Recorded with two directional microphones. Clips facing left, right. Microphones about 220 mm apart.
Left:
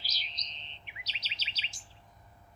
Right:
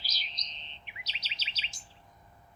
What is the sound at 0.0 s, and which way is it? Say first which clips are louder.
Bird: right 1 dB; 45° right (ahead or behind).